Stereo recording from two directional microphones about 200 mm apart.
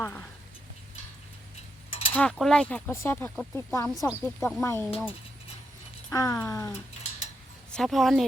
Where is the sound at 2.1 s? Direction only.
5° left (ahead or behind).